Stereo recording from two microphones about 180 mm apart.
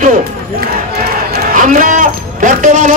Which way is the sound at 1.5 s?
45° right (ahead or behind).